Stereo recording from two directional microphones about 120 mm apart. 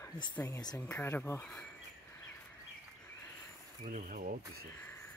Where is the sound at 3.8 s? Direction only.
90° right.